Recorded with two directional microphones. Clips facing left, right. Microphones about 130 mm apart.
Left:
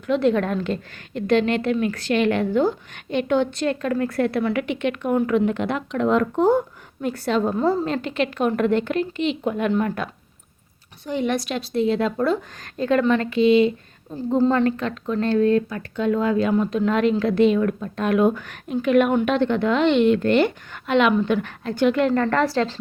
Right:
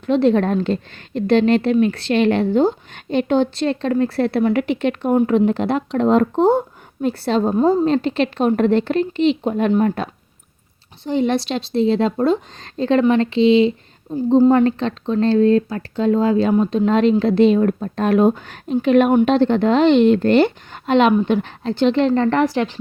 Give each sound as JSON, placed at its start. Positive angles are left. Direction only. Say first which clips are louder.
{"t": 0.0, "sound": "a woman's voice", "louder": "right 4 dB", "side_deg": -30}
{"t": 7.9, "sound": "a woman's voice", "louder": "right 6 dB", "side_deg": -30}